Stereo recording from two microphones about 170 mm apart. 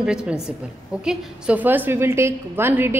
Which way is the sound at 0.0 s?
5° right (ahead or behind).